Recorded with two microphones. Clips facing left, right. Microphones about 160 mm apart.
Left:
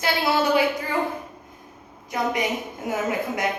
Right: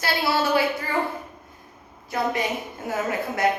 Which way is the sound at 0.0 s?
20° left (ahead or behind).